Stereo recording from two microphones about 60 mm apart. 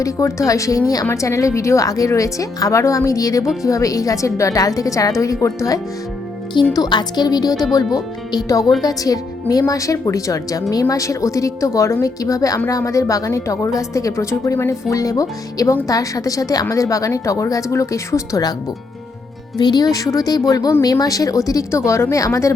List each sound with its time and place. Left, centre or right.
0.0 s speech: left
1.1 s speech: left
2.0 s speech: left
3.6 s speech: left
7.3 s speech: left
12.2 s a woman's voice: left
15.9 s a woman's voice: left
19.8 s a woman's voice: left